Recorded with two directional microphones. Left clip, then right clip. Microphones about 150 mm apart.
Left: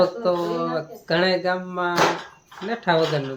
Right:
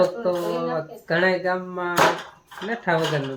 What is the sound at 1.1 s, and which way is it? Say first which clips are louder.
Speech: even; 5° left (ahead or behind).